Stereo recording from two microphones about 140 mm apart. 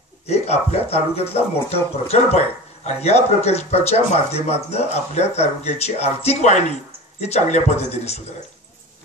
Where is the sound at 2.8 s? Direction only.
50° left (ahead or behind).